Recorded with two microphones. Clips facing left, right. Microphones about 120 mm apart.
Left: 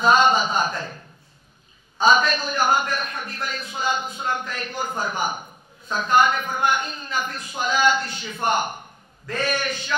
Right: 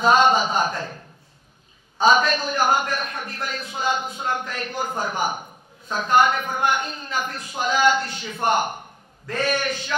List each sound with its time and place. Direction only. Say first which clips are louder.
0.0 s a man's voice: right 1 dB; 55° right (ahead or behind)
2.0 s a man's voice: right 1 dB; 55° right (ahead or behind)